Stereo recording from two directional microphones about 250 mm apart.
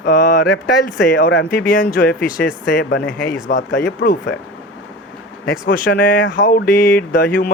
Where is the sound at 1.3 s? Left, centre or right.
Left.